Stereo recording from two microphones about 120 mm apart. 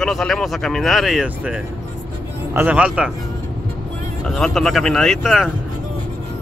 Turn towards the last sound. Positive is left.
turn(degrees=0)  # may be behind; listen again after turning